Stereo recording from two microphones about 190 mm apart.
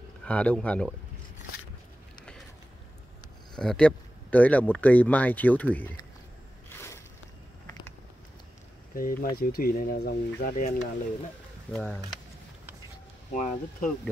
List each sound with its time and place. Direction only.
0.2 s speech: 5° left (ahead or behind)
3.5 s speech: 5° left (ahead or behind)
8.9 s speech: 50° left (ahead or behind)
11.7 s speech: 10° left (ahead or behind)
13.3 s speech: 40° left (ahead or behind)